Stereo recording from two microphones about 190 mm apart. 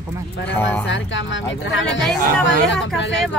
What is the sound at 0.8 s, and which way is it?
Speech, 75° left (ahead or behind).